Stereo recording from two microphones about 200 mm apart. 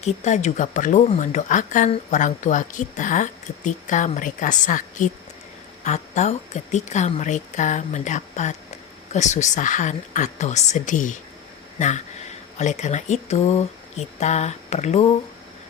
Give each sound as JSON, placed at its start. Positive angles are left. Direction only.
{"t": 0.0, "sound": "speech", "side_deg": 35}